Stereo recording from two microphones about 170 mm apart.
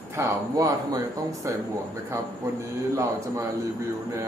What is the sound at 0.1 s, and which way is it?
A man's voice, 20° right (ahead or behind).